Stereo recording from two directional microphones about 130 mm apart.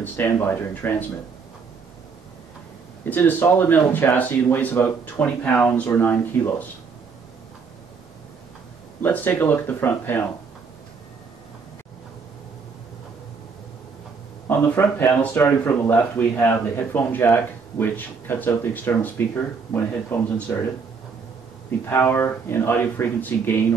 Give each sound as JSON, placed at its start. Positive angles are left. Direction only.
{"t": 0.0, "sound": "speech", "side_deg": 15}
{"t": 3.1, "sound": "speech", "side_deg": 15}
{"t": 9.0, "sound": "speech", "side_deg": 15}
{"t": 14.5, "sound": "speech", "side_deg": 15}
{"t": 21.6, "sound": "speech", "side_deg": 15}